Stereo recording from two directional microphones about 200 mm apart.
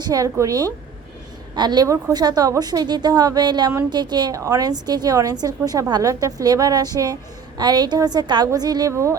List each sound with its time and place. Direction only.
0.0 s a woman's voice: 20° right (ahead or behind)